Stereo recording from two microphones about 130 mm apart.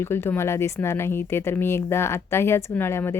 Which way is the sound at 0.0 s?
20° left (ahead or behind).